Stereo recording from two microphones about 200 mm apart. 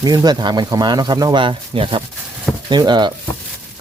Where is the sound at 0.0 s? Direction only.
20° right (ahead or behind).